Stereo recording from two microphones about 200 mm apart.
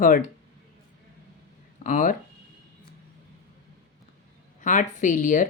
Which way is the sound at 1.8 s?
40° left (ahead or behind).